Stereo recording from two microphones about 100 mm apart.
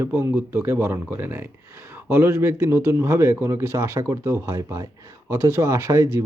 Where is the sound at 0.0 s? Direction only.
25° right (ahead or behind).